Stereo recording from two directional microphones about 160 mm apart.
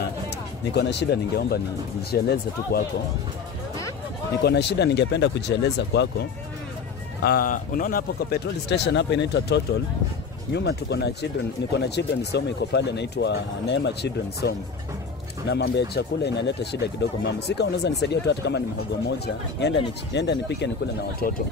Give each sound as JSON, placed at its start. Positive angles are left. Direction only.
{"t": 0.7, "sound": "speech", "side_deg": 90}
{"t": 4.4, "sound": "speech", "side_deg": 90}
{"t": 7.2, "sound": "speech", "side_deg": 65}